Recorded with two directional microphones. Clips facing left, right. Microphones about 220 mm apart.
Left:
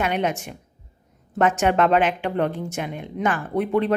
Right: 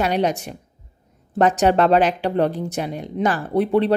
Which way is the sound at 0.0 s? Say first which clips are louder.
Right 3 dB; 35° right (ahead or behind).